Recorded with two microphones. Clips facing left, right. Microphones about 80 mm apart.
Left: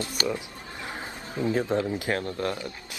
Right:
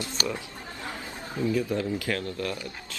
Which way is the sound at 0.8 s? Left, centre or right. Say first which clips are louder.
Left 1 dB; left.